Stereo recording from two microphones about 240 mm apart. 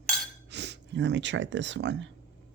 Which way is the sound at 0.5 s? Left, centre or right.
Right.